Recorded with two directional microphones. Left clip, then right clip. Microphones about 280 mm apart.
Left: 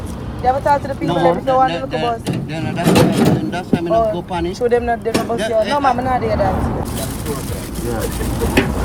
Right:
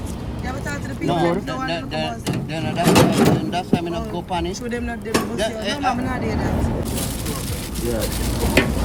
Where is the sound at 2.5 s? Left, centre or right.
Right.